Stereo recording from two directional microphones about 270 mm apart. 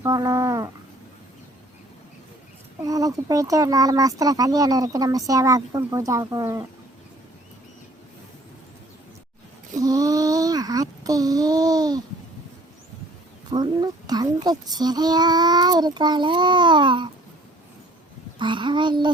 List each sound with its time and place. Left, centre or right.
0.0 s a sound: centre
2.8 s speech: centre
9.7 s child singing: centre
13.5 s speech: centre
18.3 s speech: centre